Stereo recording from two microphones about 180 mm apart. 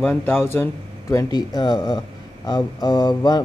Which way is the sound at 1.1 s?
20° left (ahead or behind).